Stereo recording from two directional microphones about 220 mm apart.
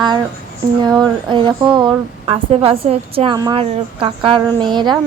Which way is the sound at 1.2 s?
20° right (ahead or behind).